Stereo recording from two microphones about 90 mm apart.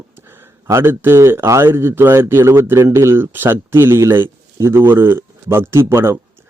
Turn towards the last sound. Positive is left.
turn(degrees=-30)  # may be behind; listen again after turning